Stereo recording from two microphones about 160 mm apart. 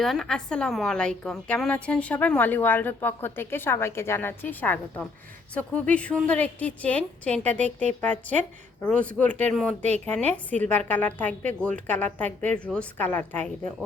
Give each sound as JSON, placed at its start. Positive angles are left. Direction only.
{"t": 0.0, "sound": "a woman's voice", "side_deg": 0}